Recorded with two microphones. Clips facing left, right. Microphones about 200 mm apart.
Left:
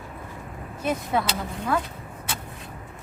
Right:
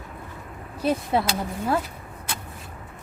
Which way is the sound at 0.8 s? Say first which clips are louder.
Right 2 dB; 30° right (ahead or behind).